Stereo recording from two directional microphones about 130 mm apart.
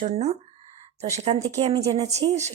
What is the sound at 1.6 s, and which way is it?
Speech, 30° right (ahead or behind).